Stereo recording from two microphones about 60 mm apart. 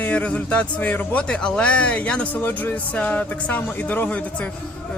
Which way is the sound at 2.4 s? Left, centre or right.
Left.